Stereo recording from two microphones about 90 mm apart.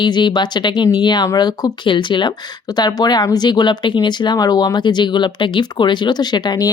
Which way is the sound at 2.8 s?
50° left (ahead or behind).